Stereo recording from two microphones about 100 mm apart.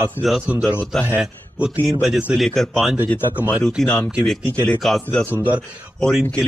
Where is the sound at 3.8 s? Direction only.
15° left (ahead or behind).